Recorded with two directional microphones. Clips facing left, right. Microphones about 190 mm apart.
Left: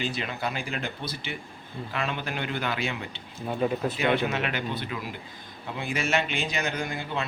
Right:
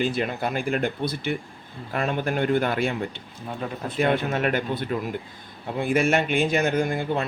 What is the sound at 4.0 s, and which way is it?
Speech, 45° right (ahead or behind).